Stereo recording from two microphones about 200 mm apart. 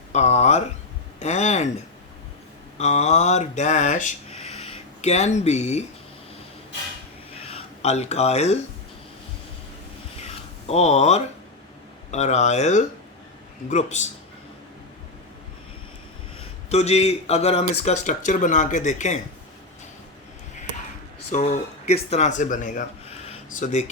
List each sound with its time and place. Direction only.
0.1 s a sound: 35° left (ahead or behind)
1.2 s speech: 35° left (ahead or behind)
2.7 s speech: 35° left (ahead or behind)
7.4 s speech: 30° left (ahead or behind)
10.2 s a sound: 30° left (ahead or behind)
12.1 s speech: 35° left (ahead or behind)
16.6 s speech: 35° left (ahead or behind)
21.2 s speech: 35° left (ahead or behind)